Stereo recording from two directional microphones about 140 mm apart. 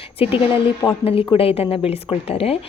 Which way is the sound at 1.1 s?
40° left (ahead or behind).